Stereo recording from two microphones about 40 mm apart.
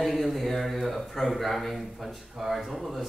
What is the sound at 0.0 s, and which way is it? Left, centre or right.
A man's voice, centre.